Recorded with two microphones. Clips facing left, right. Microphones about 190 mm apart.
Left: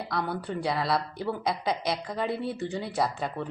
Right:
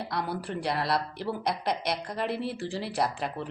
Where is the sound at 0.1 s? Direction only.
Centre (ahead or behind).